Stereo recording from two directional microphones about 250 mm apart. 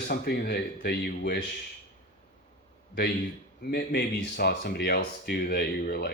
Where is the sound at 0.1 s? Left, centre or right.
Left.